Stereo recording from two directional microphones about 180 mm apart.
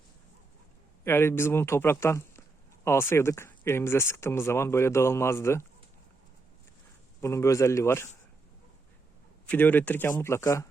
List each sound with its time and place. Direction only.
1.0 s speech: 15° left (ahead or behind)
7.2 s speech: 15° left (ahead or behind)
9.5 s speech: 10° left (ahead or behind)